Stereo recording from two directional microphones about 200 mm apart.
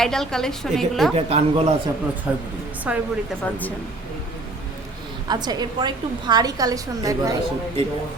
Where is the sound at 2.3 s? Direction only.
5° right (ahead or behind).